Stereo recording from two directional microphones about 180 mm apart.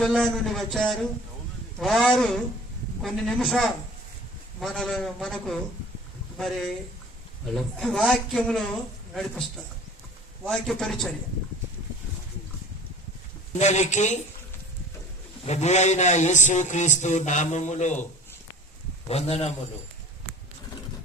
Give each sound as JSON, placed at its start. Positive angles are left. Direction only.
{"t": 0.0, "sound": "a man's voice", "side_deg": 0}
{"t": 10.4, "sound": "a man's voice", "side_deg": 0}
{"t": 13.5, "sound": "a man's voice", "side_deg": 40}
{"t": 15.4, "sound": "a man's voice", "side_deg": 40}
{"t": 19.0, "sound": "a man's voice", "side_deg": 35}